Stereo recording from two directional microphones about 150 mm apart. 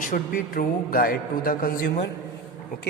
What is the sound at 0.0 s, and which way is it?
A man's voice, 65° left (ahead or behind).